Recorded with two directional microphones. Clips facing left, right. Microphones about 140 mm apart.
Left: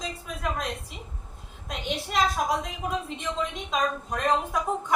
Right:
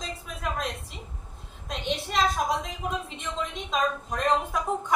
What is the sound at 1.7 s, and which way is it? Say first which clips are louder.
Speech: right 1 dB; centre (ahead or behind).